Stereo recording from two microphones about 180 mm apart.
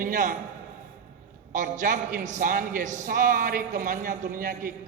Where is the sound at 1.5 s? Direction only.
45° right (ahead or behind).